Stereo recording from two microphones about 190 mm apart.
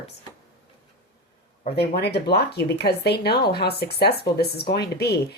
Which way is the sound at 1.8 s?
60° left (ahead or behind).